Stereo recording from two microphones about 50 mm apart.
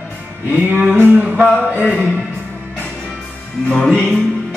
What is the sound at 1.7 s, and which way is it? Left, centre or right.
Speech, right.